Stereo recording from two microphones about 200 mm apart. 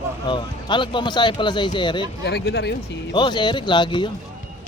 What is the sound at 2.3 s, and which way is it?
Speech, 55° left (ahead or behind).